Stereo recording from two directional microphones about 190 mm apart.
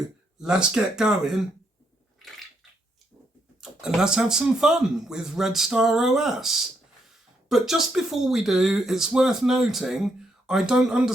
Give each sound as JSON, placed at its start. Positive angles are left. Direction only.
{"t": 0.4, "sound": "speech", "side_deg": -5}
{"t": 3.6, "sound": "speech", "side_deg": -5}